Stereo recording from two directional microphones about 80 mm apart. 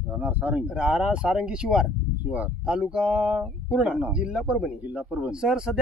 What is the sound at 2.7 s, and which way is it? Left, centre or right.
Speech, centre.